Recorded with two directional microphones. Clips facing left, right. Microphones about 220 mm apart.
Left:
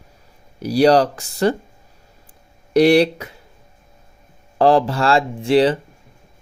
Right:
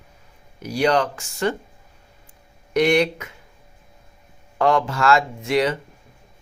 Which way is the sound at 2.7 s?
35° left (ahead or behind).